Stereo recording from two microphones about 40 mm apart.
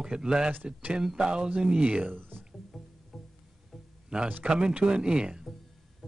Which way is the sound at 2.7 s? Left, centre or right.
Centre.